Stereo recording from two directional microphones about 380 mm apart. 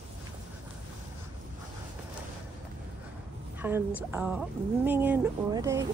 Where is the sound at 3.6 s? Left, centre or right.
Centre.